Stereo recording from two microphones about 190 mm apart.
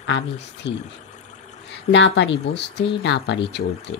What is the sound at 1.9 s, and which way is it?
Speech, 70° left (ahead or behind).